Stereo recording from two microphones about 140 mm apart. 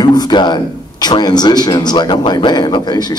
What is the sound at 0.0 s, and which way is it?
Speech, 30° left (ahead or behind).